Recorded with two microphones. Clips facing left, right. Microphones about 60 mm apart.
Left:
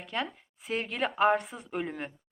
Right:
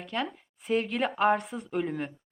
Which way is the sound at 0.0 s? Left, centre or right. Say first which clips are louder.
Right 2 dB; centre.